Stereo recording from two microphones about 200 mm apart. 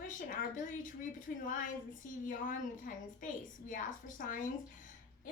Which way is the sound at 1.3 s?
40° left (ahead or behind).